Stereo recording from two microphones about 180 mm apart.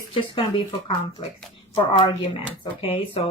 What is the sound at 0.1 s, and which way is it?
Speech, 30° left (ahead or behind).